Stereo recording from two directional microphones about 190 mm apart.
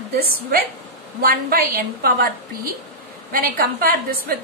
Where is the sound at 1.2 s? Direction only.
50° right (ahead or behind).